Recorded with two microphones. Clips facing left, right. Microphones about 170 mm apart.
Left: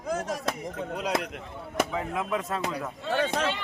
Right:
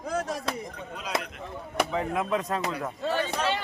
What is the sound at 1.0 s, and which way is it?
Speech, 65° left (ahead or behind).